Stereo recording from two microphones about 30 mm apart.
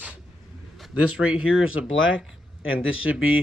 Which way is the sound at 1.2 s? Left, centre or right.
Right.